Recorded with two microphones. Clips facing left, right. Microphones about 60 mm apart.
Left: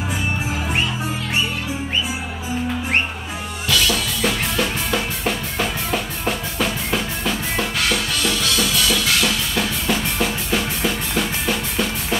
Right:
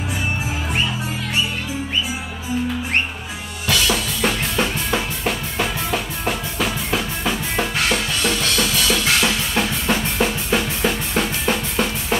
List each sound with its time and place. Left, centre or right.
3.6 s drum kit: right
5.2 s music: centre
7.5 s music: right
10.1 s drum kit: right